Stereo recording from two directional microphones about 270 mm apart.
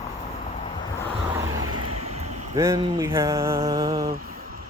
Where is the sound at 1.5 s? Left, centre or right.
Right.